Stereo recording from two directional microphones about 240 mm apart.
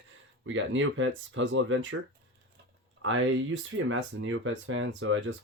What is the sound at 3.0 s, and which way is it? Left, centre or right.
Speech, right.